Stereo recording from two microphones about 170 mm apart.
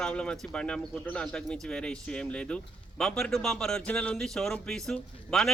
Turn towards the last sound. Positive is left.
turn(degrees=5)  # may be behind; listen again after turning